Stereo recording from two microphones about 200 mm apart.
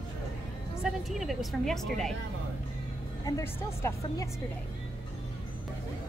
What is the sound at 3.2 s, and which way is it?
A woman's voice, 15° left (ahead or behind).